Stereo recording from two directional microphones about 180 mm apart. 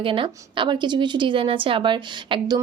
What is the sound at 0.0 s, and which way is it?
A woman's voice, 30° right (ahead or behind).